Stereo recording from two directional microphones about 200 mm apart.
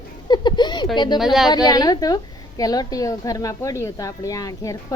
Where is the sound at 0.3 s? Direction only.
20° left (ahead or behind).